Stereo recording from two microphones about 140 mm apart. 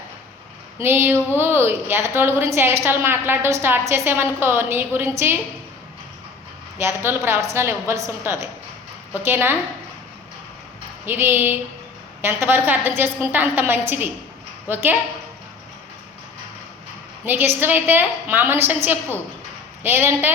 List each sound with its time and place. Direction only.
0.8 s a woman's voice: 15° right (ahead or behind)
6.7 s a woman's voice: 15° right (ahead or behind)
11.0 s a woman's voice: 15° right (ahead or behind)
17.2 s a woman's voice: 15° right (ahead or behind)